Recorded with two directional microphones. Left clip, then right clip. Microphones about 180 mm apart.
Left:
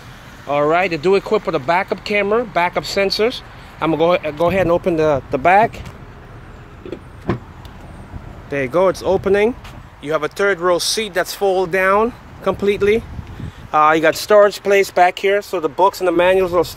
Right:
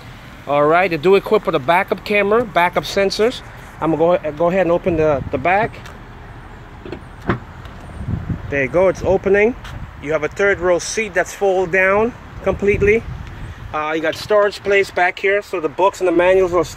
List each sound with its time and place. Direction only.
0.5 s speech: centre (ahead or behind); by 5.7 s 30° left (ahead or behind)
8.7 s speech: 25° left (ahead or behind)
13.7 s speech: 45° left (ahead or behind); by 15.7 s 25° left (ahead or behind)
16.1 s speech: 15° left (ahead or behind)